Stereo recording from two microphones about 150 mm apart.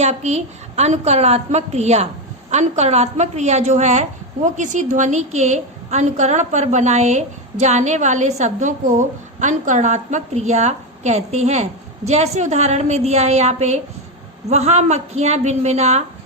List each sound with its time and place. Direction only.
0.0 s a woman's voice: 50° right (ahead or behind)